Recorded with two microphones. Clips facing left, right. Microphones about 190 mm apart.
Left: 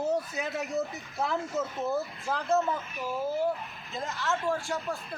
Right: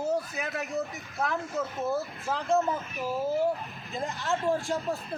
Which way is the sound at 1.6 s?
5° right (ahead or behind).